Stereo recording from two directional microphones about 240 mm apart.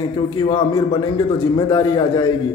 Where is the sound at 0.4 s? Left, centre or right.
Centre.